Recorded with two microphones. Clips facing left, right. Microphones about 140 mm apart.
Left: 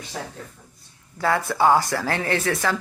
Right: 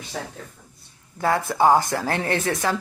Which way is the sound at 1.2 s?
20° right (ahead or behind).